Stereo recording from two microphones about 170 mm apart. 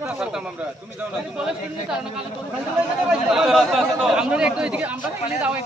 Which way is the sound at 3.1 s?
5° right (ahead or behind).